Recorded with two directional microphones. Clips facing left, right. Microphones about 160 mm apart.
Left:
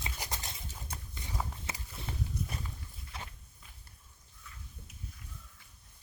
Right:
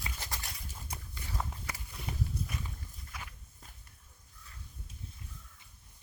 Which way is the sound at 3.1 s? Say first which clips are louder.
Left 2 dB; 30° left (ahead or behind).